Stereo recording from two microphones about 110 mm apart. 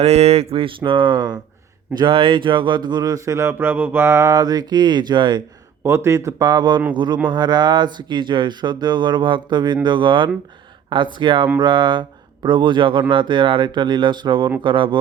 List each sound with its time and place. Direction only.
0.0 s speech: 75° right (ahead or behind); by 5.4 s 45° right (ahead or behind)
5.8 s speech: 25° right (ahead or behind)
6.5 s speech: 40° right (ahead or behind)